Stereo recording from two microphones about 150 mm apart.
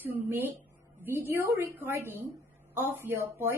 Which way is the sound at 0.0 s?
15° right (ahead or behind).